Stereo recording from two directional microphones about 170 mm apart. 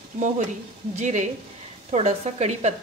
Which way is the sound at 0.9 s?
45° right (ahead or behind).